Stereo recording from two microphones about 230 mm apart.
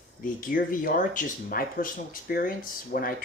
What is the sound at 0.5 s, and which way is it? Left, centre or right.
Speech, left.